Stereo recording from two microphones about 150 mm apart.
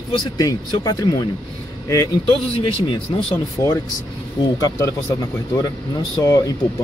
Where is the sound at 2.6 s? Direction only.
35° left (ahead or behind).